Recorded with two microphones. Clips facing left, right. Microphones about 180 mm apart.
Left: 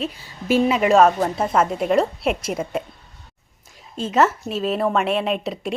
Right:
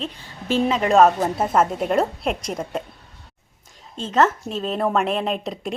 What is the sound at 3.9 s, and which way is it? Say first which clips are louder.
A woman's voice: left 1 dB; 10° left (ahead or behind).